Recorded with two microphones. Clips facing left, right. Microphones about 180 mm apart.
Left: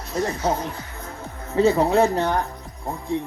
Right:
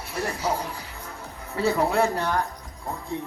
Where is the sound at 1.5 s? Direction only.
25° left (ahead or behind).